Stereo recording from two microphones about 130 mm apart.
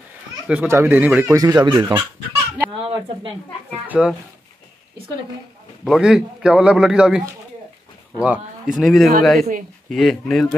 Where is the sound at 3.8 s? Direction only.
10° right (ahead or behind).